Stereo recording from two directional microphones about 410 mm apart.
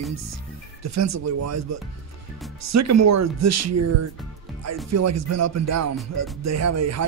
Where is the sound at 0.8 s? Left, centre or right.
Right.